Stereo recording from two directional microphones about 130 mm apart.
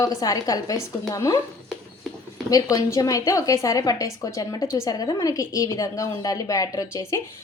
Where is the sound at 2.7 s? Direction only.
25° left (ahead or behind).